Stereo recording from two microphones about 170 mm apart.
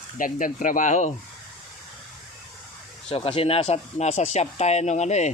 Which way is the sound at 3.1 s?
35° left (ahead or behind).